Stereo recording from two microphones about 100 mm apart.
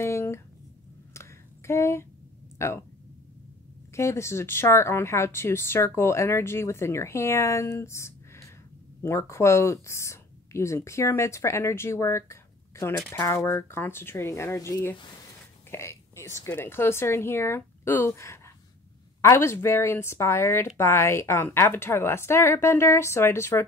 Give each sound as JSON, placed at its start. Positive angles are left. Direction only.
{"t": 0.0, "sound": "a sound", "side_deg": 25}
{"t": 1.7, "sound": "a woman's voice", "side_deg": 30}
{"t": 3.9, "sound": "a woman's voice", "side_deg": 25}